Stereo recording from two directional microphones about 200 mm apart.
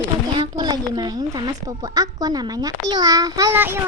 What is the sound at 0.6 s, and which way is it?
A woman's voice, 20° right (ahead or behind).